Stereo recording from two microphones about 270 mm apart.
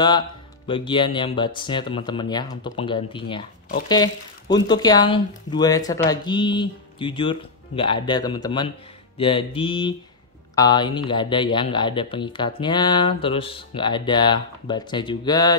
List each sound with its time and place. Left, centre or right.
0.7 s speech: centre
9.2 s music: centre
10.5 s speech: centre